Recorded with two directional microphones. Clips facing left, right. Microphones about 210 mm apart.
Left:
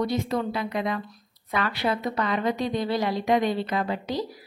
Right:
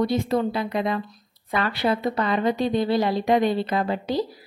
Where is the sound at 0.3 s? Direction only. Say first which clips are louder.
Right 4 dB; 30° right (ahead or behind).